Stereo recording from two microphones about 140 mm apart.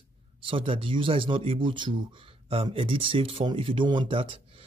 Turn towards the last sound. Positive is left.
turn(degrees=-40)  # may be behind; listen again after turning